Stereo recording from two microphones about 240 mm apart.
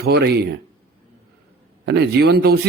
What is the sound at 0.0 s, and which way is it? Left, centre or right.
Speech, right.